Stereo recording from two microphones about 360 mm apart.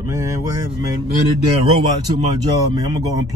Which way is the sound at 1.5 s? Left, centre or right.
Centre.